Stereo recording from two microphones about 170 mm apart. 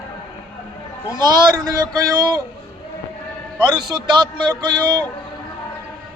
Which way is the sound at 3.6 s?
25° right (ahead or behind).